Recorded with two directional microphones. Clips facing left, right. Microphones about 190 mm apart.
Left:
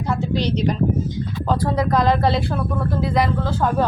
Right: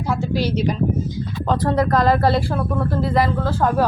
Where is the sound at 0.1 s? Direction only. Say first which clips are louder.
Right 1 dB; 5° right (ahead or behind).